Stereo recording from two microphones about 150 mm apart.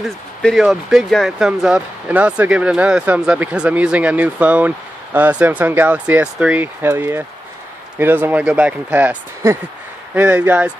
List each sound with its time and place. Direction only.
0.4 s speech: centre (ahead or behind)